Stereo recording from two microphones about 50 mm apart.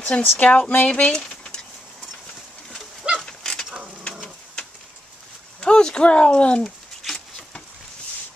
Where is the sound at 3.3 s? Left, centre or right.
Centre.